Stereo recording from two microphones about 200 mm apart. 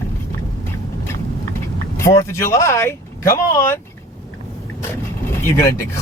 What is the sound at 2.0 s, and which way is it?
Speech, 15° left (ahead or behind).